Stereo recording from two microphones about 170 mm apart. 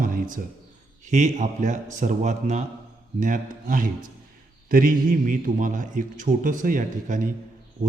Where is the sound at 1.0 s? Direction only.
45° right (ahead or behind).